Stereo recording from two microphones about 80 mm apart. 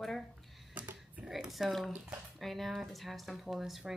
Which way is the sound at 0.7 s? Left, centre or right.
Right.